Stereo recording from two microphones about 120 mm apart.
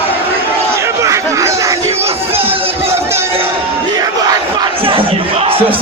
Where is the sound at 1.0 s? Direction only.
25° right (ahead or behind).